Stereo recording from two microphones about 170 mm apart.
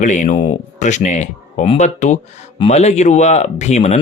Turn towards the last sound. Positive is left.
turn(degrees=40)  # may be behind; listen again after turning